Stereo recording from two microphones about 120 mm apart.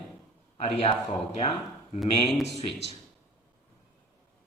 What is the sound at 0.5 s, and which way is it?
A man's voice, 65° left (ahead or behind).